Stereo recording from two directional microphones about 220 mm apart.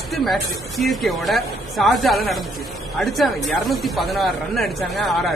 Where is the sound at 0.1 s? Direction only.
Centre (ahead or behind).